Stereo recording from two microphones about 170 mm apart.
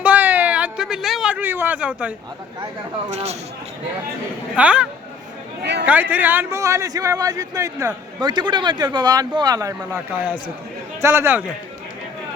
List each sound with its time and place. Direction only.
0.0 s a sound: 10° right (ahead or behind)
3.1 s speech: 40° right (ahead or behind)
4.5 s a man's voice: 5° right (ahead or behind)
11.0 s a man's voice: 15° right (ahead or behind)